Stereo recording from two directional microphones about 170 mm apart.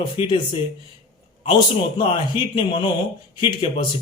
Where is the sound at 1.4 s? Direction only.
30° left (ahead or behind).